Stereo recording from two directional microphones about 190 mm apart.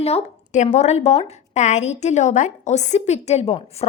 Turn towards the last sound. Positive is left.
turn(degrees=30)  # may be behind; listen again after turning